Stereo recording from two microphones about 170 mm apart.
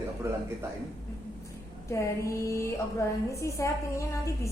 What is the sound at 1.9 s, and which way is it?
A woman's voice, 15° left (ahead or behind).